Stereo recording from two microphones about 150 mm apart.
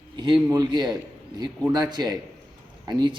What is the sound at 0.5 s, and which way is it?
A man's voice, 25° right (ahead or behind).